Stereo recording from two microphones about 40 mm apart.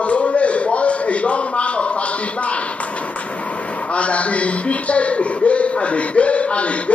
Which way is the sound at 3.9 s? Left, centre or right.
Left.